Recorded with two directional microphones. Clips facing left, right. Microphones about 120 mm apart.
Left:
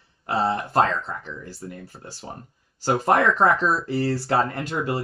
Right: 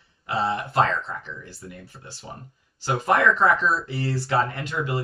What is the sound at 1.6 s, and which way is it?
Speech, 35° left (ahead or behind).